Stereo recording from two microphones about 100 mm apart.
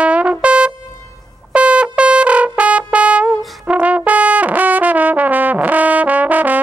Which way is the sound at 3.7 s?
15° right (ahead or behind).